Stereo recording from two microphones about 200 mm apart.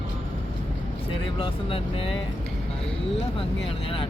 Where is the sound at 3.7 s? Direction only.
25° left (ahead or behind).